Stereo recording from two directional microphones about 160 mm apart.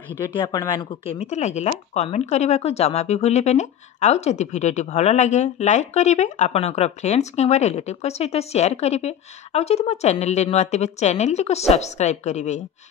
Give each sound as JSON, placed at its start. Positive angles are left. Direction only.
{"t": 0.4, "sound": "speech", "side_deg": 25}